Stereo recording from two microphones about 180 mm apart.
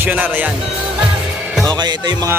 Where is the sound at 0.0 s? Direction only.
10° right (ahead or behind).